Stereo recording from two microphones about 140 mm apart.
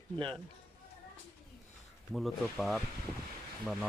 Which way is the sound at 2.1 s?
Centre (ahead or behind).